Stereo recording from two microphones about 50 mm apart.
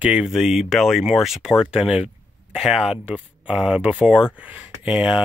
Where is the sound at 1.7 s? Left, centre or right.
Centre.